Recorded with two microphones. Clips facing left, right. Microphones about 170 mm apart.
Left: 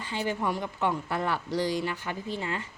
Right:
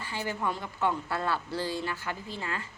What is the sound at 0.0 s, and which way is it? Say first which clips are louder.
A woman's voice: left 3 dB; 20° left (ahead or behind).